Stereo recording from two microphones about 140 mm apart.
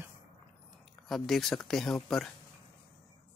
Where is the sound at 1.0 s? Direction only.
Centre (ahead or behind).